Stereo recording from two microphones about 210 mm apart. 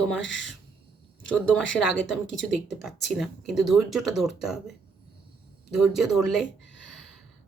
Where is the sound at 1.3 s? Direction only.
5° left (ahead or behind).